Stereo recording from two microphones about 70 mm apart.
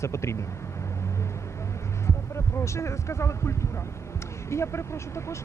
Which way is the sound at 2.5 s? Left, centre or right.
Left.